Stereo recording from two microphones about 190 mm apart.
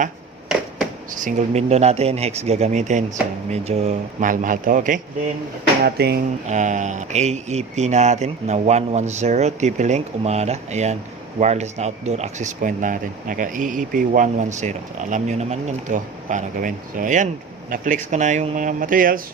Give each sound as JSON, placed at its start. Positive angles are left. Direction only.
{"t": 1.2, "sound": "speech", "side_deg": -35}
{"t": 5.8, "sound": "speech", "side_deg": -55}
{"t": 6.5, "sound": "speech", "side_deg": -40}